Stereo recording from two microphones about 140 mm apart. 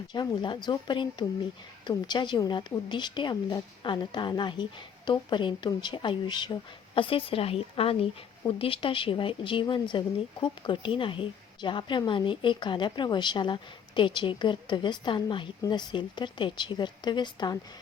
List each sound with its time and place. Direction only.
0.1 s a woman's voice: 35° left (ahead or behind)